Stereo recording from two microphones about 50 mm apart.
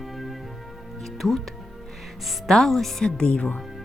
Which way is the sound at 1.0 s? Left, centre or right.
Centre.